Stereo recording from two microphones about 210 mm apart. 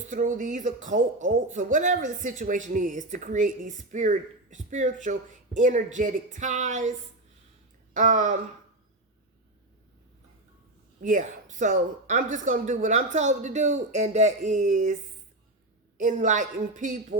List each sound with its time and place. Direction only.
0.1 s speech: 40° right (ahead or behind)
7.9 s speech: 35° right (ahead or behind)
11.0 s speech: 35° right (ahead or behind)
16.0 s speech: 35° right (ahead or behind)